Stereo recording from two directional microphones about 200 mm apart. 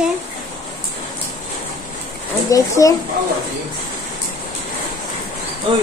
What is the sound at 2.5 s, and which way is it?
Speech, 15° left (ahead or behind).